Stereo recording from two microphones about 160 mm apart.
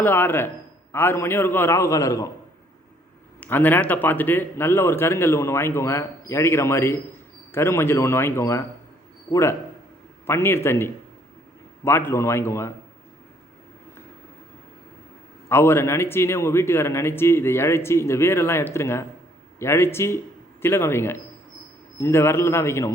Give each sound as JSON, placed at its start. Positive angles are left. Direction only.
{"t": 0.0, "sound": "speech", "side_deg": 10}
{"t": 3.4, "sound": "speech", "side_deg": 10}
{"t": 15.4, "sound": "speech", "side_deg": 15}